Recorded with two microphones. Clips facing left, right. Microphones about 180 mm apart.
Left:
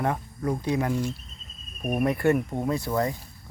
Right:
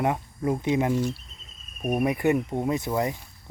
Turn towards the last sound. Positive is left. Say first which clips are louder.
# even
turn(degrees=-20)  # may be behind; listen again after turning